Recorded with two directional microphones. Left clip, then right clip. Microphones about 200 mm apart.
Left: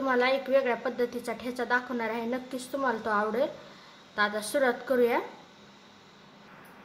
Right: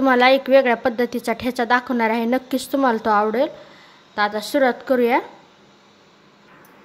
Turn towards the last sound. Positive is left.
turn(degrees=-30)  # may be behind; listen again after turning